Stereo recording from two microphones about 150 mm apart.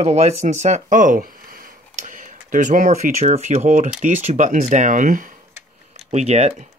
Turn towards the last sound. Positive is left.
turn(degrees=-45)  # may be behind; listen again after turning